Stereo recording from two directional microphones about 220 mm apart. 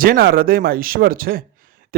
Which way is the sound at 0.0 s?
40° right (ahead or behind).